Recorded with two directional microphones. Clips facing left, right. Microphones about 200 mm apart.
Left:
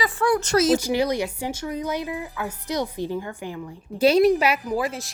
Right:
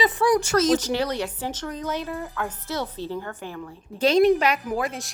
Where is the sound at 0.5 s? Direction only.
10° left (ahead or behind).